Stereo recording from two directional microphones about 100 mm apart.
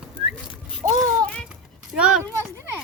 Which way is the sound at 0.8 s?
30° right (ahead or behind).